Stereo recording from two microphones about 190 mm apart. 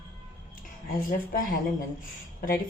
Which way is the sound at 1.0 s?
45° left (ahead or behind).